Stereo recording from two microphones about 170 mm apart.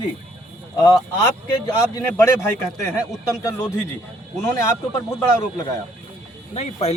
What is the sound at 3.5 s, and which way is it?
A man's voice, 15° left (ahead or behind).